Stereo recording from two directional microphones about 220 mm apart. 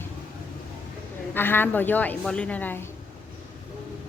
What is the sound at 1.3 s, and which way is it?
A woman's voice, 10° left (ahead or behind).